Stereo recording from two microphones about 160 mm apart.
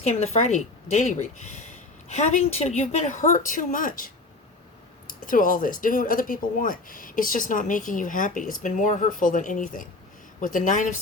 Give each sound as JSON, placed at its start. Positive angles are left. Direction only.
{"t": 0.0, "sound": "speech", "side_deg": 40}